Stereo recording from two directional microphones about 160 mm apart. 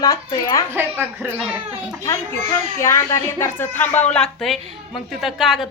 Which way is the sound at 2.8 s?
20° left (ahead or behind).